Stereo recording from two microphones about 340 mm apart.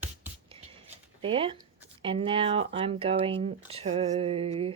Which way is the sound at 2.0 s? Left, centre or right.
Centre.